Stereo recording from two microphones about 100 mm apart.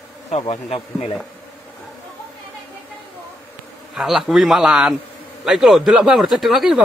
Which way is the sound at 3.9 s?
5° right (ahead or behind).